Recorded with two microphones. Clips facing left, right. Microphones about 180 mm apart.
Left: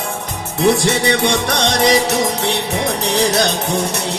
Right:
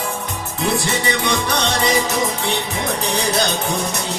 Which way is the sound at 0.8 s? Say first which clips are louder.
Left 5 dB; 75° left (ahead or behind).